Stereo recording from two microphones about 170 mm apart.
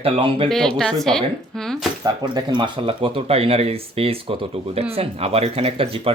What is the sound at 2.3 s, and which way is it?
Speech, 30° right (ahead or behind).